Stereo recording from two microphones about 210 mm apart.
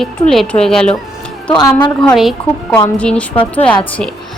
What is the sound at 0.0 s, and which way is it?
Speech, centre (ahead or behind).